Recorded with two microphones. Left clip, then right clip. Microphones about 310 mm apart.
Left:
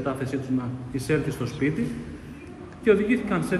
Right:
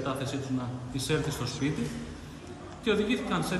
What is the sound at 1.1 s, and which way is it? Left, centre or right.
Speech, centre.